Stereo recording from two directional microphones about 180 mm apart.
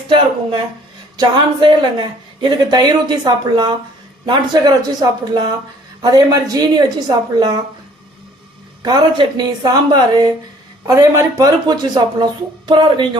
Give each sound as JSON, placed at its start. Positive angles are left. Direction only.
{"t": 1.1, "sound": "a woman's voice", "side_deg": -25}
{"t": 8.8, "sound": "a woman's voice", "side_deg": -25}